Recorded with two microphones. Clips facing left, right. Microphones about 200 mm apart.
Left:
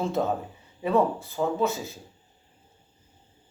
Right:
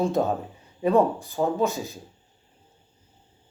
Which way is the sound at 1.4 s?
15° right (ahead or behind).